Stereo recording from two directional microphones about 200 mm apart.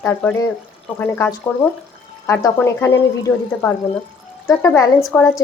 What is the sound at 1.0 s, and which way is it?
Speech, 10° left (ahead or behind).